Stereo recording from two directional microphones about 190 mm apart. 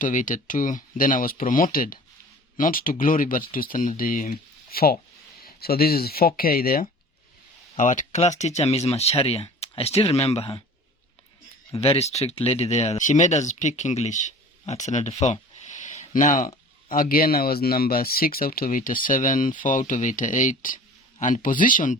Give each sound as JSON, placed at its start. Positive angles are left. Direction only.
{"t": 0.0, "sound": "speech", "side_deg": 45}
{"t": 11.7, "sound": "speech", "side_deg": 30}